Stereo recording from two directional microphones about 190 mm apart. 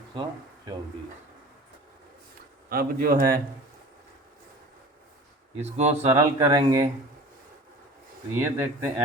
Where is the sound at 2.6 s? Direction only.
50° right (ahead or behind).